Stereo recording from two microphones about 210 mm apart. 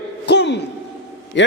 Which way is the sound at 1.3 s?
60° left (ahead or behind).